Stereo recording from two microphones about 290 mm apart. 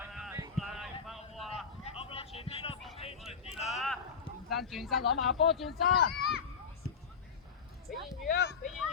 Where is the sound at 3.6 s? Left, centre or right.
Centre.